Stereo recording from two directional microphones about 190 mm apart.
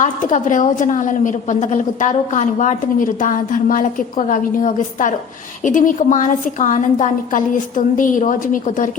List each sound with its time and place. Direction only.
0.0 s a woman's voice: 40° left (ahead or behind)